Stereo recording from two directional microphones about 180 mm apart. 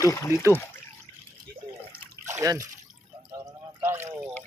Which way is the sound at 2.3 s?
15° right (ahead or behind).